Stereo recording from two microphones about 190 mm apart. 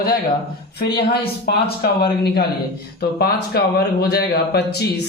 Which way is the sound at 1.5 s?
55° left (ahead or behind).